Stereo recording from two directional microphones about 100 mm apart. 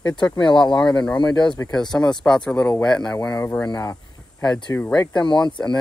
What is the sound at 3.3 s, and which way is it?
Speech, 30° left (ahead or behind).